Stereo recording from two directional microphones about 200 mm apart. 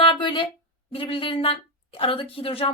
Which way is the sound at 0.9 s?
25° left (ahead or behind).